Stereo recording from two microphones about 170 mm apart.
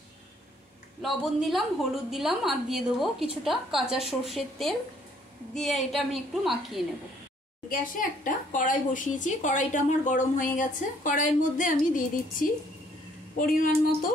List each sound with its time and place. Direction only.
1.0 s a woman's voice: centre (ahead or behind)
7.7 s a woman's voice: 55° left (ahead or behind)